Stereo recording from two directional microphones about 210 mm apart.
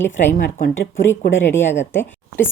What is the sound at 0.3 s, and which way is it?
Speech, 45° left (ahead or behind).